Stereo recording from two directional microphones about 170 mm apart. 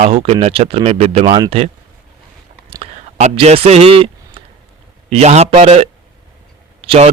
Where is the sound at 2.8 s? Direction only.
35° right (ahead or behind).